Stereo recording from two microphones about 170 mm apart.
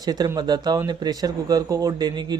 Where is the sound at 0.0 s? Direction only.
25° right (ahead or behind).